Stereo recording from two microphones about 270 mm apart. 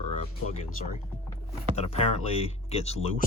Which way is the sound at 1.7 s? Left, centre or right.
Left.